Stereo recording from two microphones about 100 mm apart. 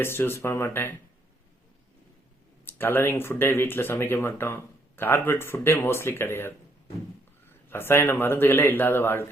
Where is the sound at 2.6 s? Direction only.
20° left (ahead or behind).